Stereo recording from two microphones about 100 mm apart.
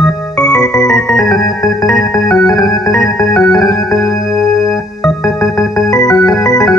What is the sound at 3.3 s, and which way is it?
Music, 35° left (ahead or behind).